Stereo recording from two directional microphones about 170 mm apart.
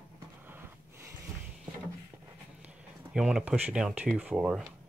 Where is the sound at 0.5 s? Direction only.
15° right (ahead or behind).